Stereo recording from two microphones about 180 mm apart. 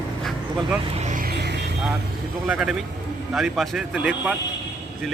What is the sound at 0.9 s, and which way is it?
Vehicle, 45° right (ahead or behind).